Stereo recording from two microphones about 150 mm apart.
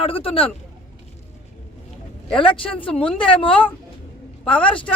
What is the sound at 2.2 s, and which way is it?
A man's voice, 35° left (ahead or behind).